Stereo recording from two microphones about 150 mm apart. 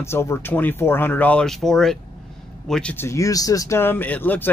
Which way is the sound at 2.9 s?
20° left (ahead or behind).